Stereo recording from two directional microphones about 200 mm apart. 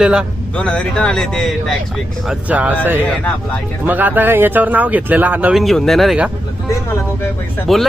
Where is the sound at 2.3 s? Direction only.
5° right (ahead or behind).